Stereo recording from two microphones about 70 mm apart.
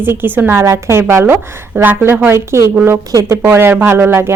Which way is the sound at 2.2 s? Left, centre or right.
Right.